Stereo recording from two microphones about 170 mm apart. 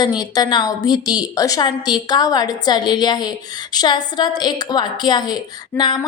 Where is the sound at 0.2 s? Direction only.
25° left (ahead or behind).